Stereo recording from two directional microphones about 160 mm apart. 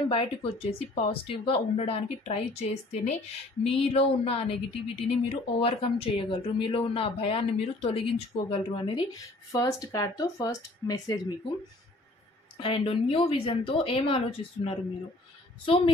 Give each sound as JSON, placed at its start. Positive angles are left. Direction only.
{"t": 0.1, "sound": "speech", "side_deg": 35}
{"t": 9.1, "sound": "speech", "side_deg": 25}
{"t": 12.5, "sound": "speech", "side_deg": 35}